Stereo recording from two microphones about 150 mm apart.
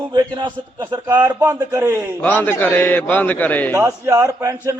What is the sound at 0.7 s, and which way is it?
A man's voice, 15° right (ahead or behind).